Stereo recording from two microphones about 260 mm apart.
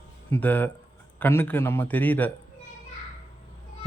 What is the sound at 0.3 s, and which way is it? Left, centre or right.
Speech, centre.